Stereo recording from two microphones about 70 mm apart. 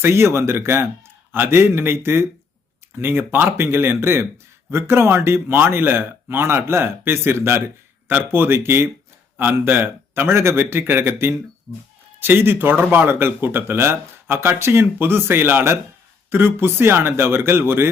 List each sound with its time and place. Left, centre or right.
0.0 s speech: right